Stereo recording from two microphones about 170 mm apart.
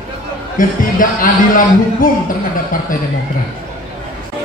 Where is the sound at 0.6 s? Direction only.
50° left (ahead or behind).